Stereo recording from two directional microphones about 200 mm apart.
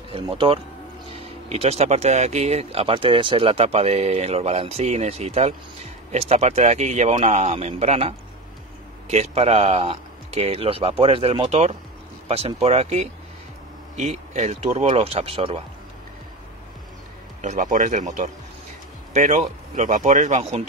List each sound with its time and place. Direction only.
0.1 s speech: 25° right (ahead or behind)
9.1 s speech: 30° right (ahead or behind)
17.4 s speech: 35° right (ahead or behind)